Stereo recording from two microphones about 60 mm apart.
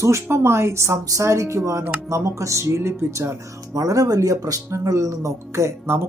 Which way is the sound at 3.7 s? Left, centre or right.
Right.